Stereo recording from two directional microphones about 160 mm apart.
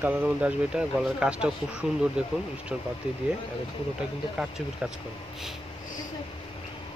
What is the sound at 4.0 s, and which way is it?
Speech, 5° right (ahead or behind).